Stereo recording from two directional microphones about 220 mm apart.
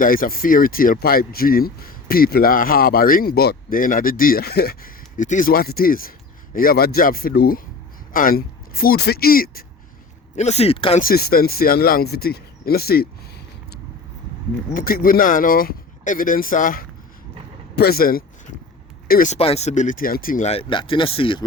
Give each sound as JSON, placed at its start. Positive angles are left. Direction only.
{"t": 0.0, "sound": "speech", "side_deg": 40}
{"t": 10.3, "sound": "speech", "side_deg": 30}
{"t": 11.0, "sound": "speech", "side_deg": 45}
{"t": 14.7, "sound": "speech", "side_deg": 40}